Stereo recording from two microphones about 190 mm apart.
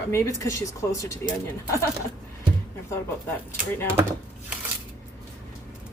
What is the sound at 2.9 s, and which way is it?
Speech, 15° left (ahead or behind).